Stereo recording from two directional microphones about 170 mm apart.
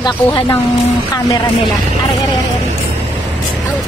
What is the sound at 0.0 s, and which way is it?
Speech, 30° left (ahead or behind).